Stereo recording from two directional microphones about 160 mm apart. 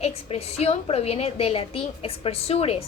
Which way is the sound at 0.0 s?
40° left (ahead or behind).